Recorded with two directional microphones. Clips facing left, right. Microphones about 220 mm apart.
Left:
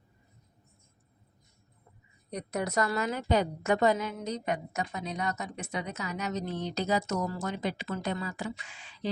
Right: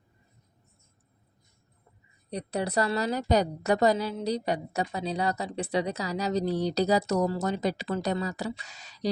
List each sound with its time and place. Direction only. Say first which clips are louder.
2.3 s a woman's voice: right 2 dB; 30° right (ahead or behind)